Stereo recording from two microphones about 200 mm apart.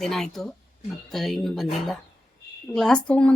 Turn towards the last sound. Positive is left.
turn(degrees=5)  # may be behind; listen again after turning